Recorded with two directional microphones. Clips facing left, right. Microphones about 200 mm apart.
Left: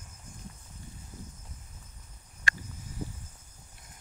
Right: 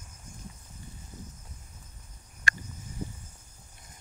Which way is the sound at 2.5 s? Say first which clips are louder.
Right 1 dB; 45° right (ahead or behind).